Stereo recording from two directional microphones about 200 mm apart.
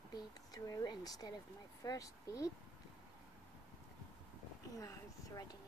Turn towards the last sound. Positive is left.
turn(degrees=20)  # may be behind; listen again after turning